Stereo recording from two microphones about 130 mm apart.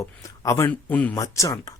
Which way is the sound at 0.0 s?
25° left (ahead or behind).